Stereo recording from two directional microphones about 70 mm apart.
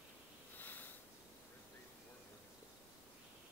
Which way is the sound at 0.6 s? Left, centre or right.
Left.